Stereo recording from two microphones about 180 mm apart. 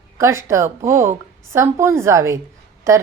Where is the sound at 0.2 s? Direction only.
15° right (ahead or behind).